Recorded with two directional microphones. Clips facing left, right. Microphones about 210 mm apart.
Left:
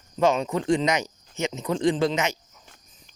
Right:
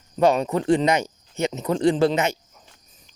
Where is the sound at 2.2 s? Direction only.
55° right (ahead or behind).